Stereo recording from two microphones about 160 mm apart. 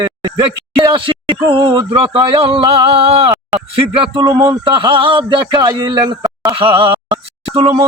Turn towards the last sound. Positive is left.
turn(degrees=-30)  # may be behind; listen again after turning